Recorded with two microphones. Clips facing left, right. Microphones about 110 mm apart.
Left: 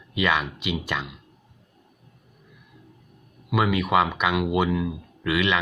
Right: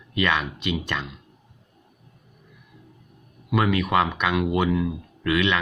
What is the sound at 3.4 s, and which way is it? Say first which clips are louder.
Speech: right 1 dB; 5° left (ahead or behind).